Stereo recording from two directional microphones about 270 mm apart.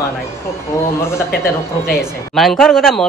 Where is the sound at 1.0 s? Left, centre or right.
Centre.